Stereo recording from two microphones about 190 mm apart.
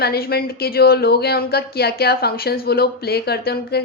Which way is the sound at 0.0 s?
55° left (ahead or behind).